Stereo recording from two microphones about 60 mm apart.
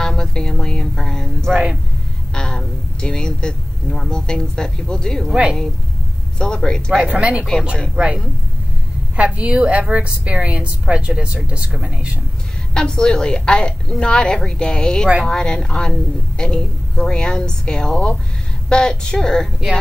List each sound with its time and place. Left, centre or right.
0.0 s a sound: centre
1.5 s a woman's voice: centre
2.3 s speech: centre
5.3 s speech: centre
6.3 s a woman's voice: centre
7.1 s a woman's voice: centre
12.7 s a woman's voice: centre